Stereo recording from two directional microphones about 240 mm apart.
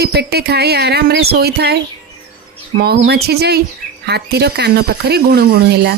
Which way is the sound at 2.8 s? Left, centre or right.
Right.